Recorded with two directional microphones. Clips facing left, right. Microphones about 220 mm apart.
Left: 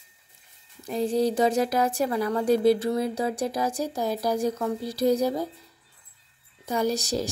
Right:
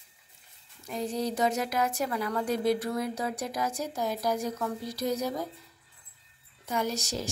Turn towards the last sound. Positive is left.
turn(degrees=35)  # may be behind; listen again after turning